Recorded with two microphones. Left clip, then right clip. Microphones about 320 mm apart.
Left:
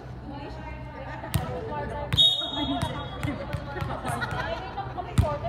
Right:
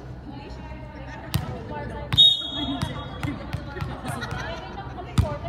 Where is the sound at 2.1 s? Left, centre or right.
Centre.